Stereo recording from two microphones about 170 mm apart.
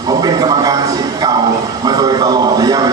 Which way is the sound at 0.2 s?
20° right (ahead or behind).